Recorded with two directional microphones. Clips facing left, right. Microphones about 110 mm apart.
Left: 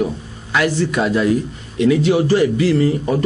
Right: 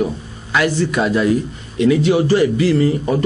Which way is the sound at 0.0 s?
20° right (ahead or behind).